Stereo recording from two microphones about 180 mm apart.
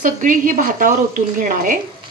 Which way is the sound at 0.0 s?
45° right (ahead or behind).